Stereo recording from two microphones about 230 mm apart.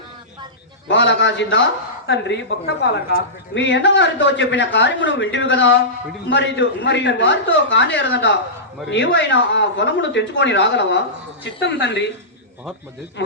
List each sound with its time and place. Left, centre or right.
0.9 s speech: left
13.2 s speech: left